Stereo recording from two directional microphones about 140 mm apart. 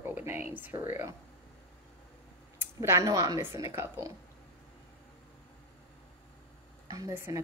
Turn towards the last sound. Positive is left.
turn(degrees=-20)  # may be behind; listen again after turning